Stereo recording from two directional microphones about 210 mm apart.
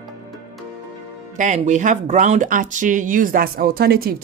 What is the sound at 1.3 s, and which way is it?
A woman's voice, 35° right (ahead or behind).